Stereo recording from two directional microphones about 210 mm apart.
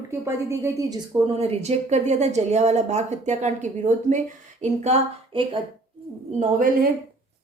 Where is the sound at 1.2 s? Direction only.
30° right (ahead or behind).